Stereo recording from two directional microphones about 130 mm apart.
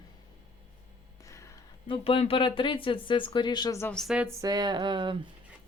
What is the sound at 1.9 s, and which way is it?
Speech, 45° left (ahead or behind).